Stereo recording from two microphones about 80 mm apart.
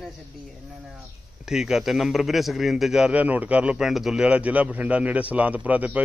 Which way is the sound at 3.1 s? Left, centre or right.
Centre.